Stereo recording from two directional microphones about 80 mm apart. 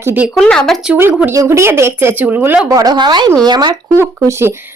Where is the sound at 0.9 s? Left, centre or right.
Right.